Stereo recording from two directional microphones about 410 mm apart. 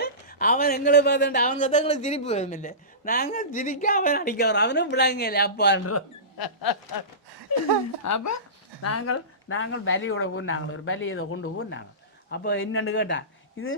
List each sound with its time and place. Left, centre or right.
0.0 s speech: left
6.3 s a sound: left
8.0 s speech: left